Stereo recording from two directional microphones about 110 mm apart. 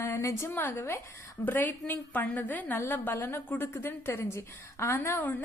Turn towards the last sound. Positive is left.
turn(degrees=20)  # may be behind; listen again after turning